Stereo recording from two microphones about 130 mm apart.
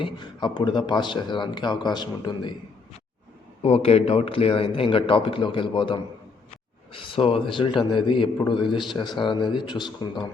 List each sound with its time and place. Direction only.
0.0 s a man's voice: 35° left (ahead or behind)
3.6 s a man's voice: 50° left (ahead or behind)